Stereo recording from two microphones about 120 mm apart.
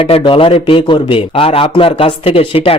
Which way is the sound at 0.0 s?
50° left (ahead or behind).